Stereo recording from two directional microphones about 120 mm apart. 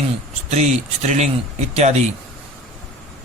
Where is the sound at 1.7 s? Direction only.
65° right (ahead or behind).